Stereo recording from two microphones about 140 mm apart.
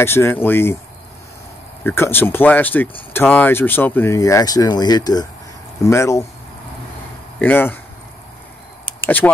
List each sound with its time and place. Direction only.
0.0 s speech: 15° left (ahead or behind)
1.9 s speech: 15° left (ahead or behind)
7.3 s speech: 15° left (ahead or behind)
9.0 s speech: 15° left (ahead or behind)